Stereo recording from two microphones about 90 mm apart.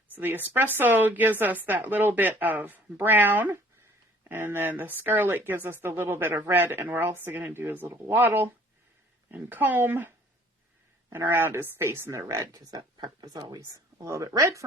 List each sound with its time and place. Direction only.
0.1 s speech: 20° right (ahead or behind)
12.5 s speech: 50° right (ahead or behind)